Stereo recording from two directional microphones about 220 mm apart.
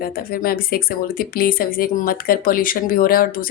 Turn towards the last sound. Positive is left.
turn(degrees=40)  # may be behind; listen again after turning